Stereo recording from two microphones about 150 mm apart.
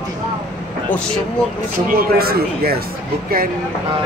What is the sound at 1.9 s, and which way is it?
Speech, 85° right.